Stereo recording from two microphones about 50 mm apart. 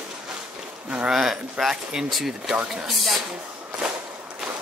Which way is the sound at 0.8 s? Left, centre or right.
Right.